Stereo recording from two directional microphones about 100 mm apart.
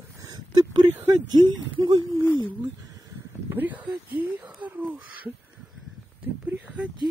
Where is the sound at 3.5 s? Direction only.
15° right (ahead or behind).